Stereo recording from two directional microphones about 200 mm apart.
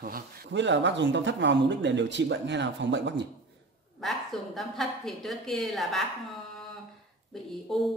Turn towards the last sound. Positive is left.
turn(degrees=0)  # may be behind; listen again after turning